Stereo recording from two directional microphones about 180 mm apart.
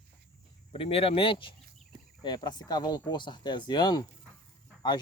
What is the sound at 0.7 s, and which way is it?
Speech, 30° left (ahead or behind).